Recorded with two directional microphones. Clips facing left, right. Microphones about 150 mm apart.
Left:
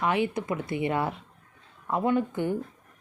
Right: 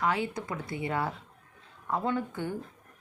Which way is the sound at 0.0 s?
20° left (ahead or behind).